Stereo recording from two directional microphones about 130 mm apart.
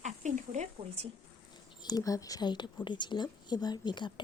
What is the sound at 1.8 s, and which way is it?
A woman's voice, 30° left (ahead or behind).